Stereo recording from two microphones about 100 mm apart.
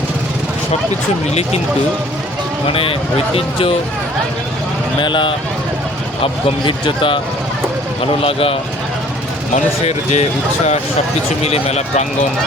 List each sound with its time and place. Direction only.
2.6 s speech: 65° left (ahead or behind)
4.9 s speech: 55° left (ahead or behind)
9.8 s speech: 90° left
11.4 s speech: 90° left